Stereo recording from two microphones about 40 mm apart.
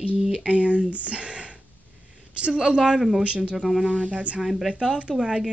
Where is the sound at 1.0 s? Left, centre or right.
Right.